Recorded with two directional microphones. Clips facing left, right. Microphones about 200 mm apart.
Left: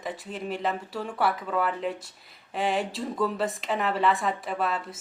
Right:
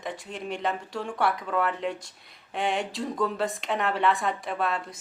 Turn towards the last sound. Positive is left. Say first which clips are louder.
# even
turn(degrees=0)  # may be behind; listen again after turning